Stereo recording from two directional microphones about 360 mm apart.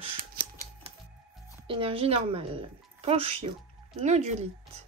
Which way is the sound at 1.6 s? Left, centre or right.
Centre.